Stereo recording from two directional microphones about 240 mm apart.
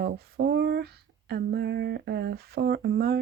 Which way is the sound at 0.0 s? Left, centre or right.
Right.